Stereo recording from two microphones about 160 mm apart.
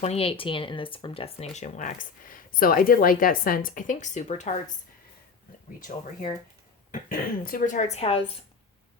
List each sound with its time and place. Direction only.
0.0 s speech: 40° left (ahead or behind)
6.9 s speech: 60° left (ahead or behind); by 8.2 s 40° left (ahead or behind)